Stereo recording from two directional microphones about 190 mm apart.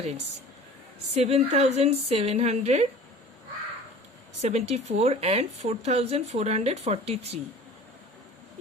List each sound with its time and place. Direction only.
1.1 s speech: 35° right (ahead or behind)
4.4 s speech: 35° right (ahead or behind)